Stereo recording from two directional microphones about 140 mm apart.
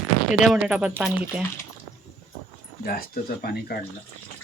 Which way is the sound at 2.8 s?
90° left.